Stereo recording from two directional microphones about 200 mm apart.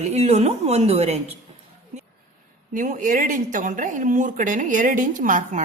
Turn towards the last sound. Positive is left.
turn(degrees=-40)  # may be behind; listen again after turning